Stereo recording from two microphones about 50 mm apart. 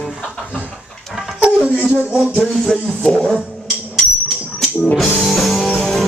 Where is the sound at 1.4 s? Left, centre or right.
Centre.